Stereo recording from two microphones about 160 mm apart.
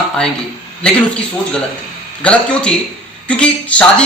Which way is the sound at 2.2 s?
10° left (ahead or behind).